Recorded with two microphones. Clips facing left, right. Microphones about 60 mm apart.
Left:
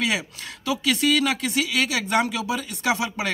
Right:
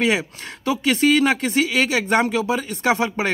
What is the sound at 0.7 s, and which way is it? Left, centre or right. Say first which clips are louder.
Speech: right 4 dB; right.